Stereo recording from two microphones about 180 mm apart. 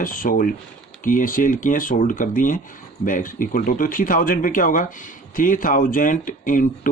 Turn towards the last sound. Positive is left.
turn(degrees=45)  # may be behind; listen again after turning